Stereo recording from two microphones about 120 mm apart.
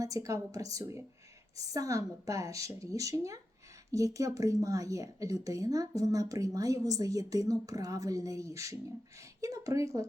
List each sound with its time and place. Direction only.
0.0 s speech: 30° right (ahead or behind)